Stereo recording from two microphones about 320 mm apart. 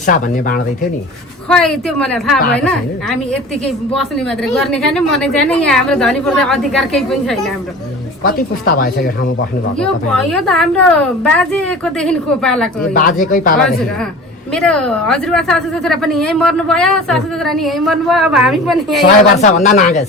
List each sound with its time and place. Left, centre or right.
0.0 s speech: left
1.5 s a woman's voice: centre
4.5 s a woman's voice: centre
8.2 s speech: left
9.8 s a woman's voice: centre
12.9 s speech: left
14.5 s a woman's voice: centre
19.4 s speech: left